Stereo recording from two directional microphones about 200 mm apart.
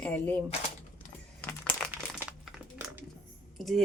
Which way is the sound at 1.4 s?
5° left (ahead or behind).